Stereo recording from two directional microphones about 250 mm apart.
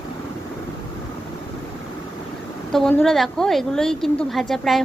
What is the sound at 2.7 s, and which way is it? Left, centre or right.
A woman's voice, centre.